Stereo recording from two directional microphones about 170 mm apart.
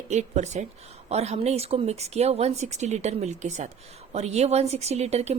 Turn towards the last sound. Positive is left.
turn(degrees=-40)  # may be behind; listen again after turning